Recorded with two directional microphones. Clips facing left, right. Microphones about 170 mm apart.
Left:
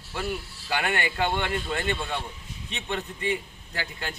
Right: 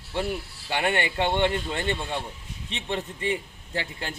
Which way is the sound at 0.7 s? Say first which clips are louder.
Right 2 dB; 30° right (ahead or behind).